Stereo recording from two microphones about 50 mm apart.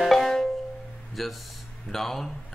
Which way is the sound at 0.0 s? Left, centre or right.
Centre.